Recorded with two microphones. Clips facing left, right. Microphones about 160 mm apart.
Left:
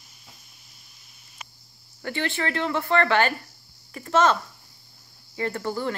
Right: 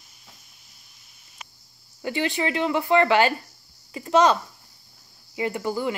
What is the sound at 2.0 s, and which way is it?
Speech, 15° right (ahead or behind).